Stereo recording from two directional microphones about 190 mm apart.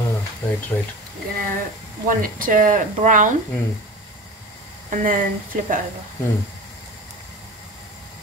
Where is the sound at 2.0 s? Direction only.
45° right (ahead or behind).